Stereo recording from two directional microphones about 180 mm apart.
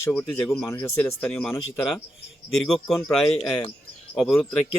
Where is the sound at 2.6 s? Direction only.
5° left (ahead or behind).